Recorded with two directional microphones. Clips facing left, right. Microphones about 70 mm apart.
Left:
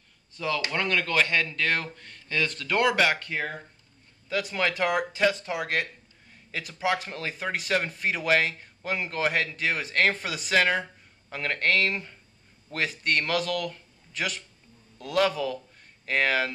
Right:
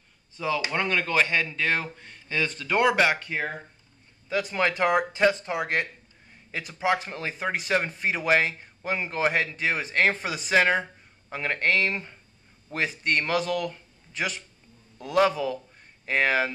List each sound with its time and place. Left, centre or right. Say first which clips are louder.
0.4 s a man's voice: right 1 dB; centre